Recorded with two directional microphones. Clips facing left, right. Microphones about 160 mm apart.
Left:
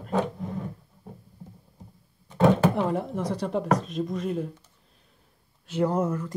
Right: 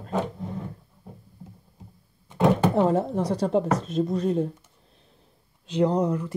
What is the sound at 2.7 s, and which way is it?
Speech, 40° right (ahead or behind).